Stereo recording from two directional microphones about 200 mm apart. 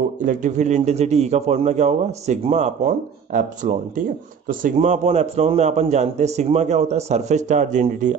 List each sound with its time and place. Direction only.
0.2 s a man's voice: 40° right (ahead or behind)